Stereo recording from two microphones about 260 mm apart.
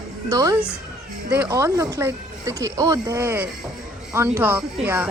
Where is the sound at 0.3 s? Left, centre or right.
Centre.